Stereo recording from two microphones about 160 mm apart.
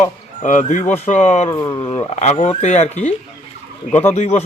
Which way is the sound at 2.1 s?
45° left (ahead or behind).